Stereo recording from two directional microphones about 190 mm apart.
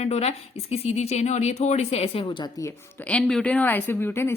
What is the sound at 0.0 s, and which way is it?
A woman's voice, 35° left (ahead or behind).